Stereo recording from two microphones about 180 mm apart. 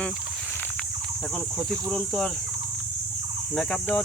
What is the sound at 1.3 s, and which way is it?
Speech, centre (ahead or behind).